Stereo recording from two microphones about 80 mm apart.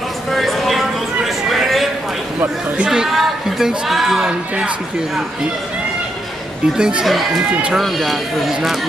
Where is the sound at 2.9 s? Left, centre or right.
Centre.